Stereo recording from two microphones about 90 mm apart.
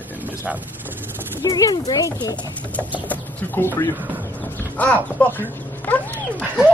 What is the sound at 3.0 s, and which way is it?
Speech, 25° left (ahead or behind).